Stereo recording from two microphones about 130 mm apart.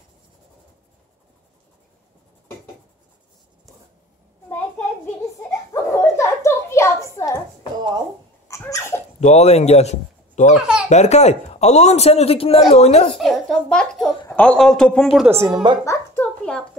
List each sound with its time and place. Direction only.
5.7 s a sound: 20° left (ahead or behind)
8.5 s a sound: 25° left (ahead or behind)
9.2 s a man's voice: 55° left (ahead or behind)
10.5 s a child's voice: 5° right (ahead or behind)
10.9 s a man's voice: 60° left (ahead or behind)
13.2 s a child's voice: centre (ahead or behind)
15.2 s a woman's voice: 20° right (ahead or behind)
15.5 s speech: 35° right (ahead or behind)
15.8 s music: 25° left (ahead or behind)